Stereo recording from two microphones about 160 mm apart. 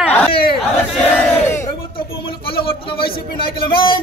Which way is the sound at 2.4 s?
35° left (ahead or behind).